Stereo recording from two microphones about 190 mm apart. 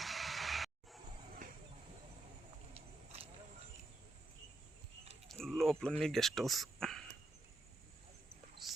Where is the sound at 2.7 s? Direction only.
30° right (ahead or behind).